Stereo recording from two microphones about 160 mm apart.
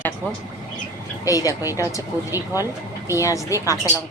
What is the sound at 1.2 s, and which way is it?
Speech, 20° left (ahead or behind).